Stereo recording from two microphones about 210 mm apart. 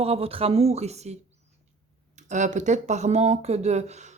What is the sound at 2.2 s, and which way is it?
Speech, 35° right (ahead or behind).